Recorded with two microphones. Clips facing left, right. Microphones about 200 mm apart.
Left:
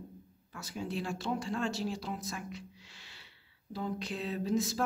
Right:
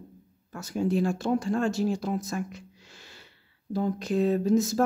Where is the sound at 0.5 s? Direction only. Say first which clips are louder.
Right 11 dB; 45° right (ahead or behind).